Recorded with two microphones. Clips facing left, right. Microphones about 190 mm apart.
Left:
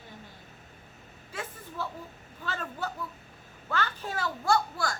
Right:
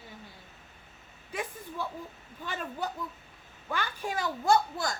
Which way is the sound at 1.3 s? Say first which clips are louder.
Right 3 dB; 15° right (ahead or behind).